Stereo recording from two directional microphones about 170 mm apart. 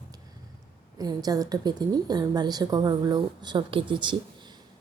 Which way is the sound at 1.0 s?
20° right (ahead or behind).